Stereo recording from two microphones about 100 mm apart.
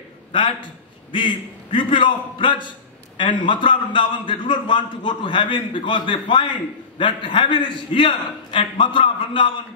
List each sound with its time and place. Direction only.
0.3 s a man's voice: 55° left (ahead or behind)